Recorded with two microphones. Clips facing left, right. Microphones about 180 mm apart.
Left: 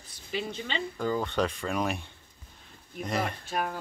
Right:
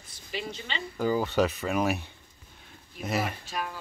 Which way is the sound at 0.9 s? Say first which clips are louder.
Right 4 dB; 5° right (ahead or behind).